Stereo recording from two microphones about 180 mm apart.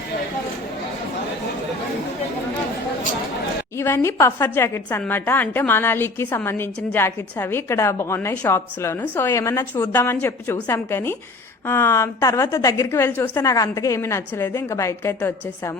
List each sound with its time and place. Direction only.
3.8 s a woman's voice: 15° left (ahead or behind)